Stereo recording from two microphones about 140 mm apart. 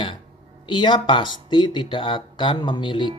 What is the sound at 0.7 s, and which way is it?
Speech, 35° left (ahead or behind).